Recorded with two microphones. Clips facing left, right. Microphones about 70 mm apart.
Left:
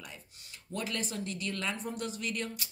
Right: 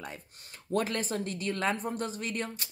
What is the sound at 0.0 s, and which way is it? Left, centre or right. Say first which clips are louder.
Speech: right 6 dB; right.